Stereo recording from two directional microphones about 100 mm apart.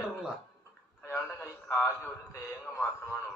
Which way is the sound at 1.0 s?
25° left (ahead or behind).